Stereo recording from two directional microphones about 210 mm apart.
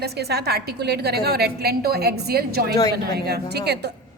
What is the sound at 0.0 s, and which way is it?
A woman's voice, 50° right (ahead or behind).